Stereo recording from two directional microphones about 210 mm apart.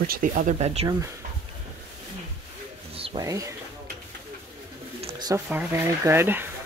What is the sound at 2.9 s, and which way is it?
Rub, 25° right (ahead or behind).